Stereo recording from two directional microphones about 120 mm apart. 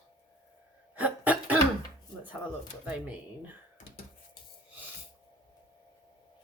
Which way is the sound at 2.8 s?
10° right (ahead or behind).